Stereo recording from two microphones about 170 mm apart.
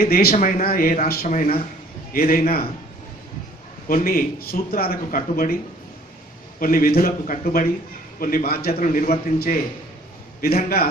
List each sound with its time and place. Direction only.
0.0 s speech: 65° left (ahead or behind)
0.3 s speech: 55° left (ahead or behind)
3.8 s speech: 55° left (ahead or behind)
6.6 s speech: 55° left (ahead or behind)